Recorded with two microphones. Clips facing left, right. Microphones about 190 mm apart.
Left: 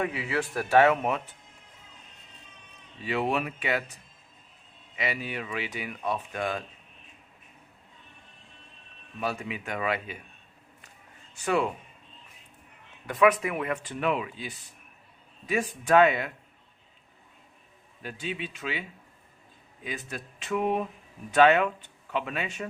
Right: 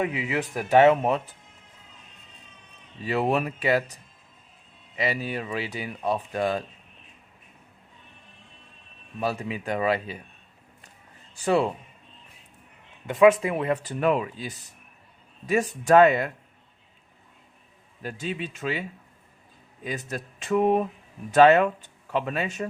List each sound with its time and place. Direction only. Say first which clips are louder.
0.0 s speech: right 2 dB; 20° right (ahead or behind)
3.0 s speech: right 4 dB; 40° right (ahead or behind)
4.9 s speech: right 4 dB; 35° right (ahead or behind)
9.2 s speech: right 4 dB; 35° right (ahead or behind)
11.3 s speech: right 4 dB; 30° right (ahead or behind)
13.1 s speech: right 5 dB; 25° right (ahead or behind); by 16.3 s 40° right (ahead or behind)
18.0 s speech: right 3 dB; 40° right (ahead or behind)